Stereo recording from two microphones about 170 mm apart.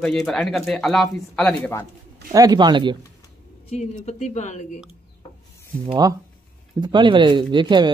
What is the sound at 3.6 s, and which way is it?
Speech, 40° left (ahead or behind).